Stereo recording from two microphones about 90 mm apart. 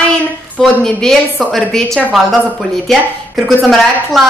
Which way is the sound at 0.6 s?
5° left (ahead or behind).